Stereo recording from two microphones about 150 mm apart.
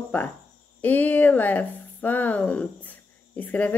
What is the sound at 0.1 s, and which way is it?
Speech, 10° left (ahead or behind).